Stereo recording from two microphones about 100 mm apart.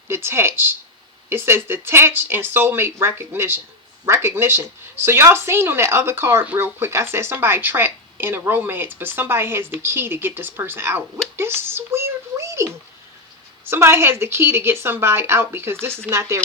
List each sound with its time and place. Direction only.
0.1 s speech: 25° right (ahead or behind)
11.3 s a sound: 25° right (ahead or behind)
13.7 s speech: 25° right (ahead or behind)